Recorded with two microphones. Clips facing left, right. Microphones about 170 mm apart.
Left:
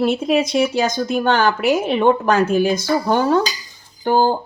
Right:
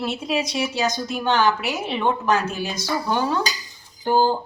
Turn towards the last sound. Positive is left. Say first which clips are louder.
# left 3 dB
turn(degrees=55)  # may be behind; listen again after turning